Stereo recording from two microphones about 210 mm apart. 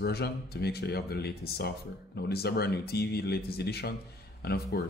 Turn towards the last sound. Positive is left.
turn(degrees=50)  # may be behind; listen again after turning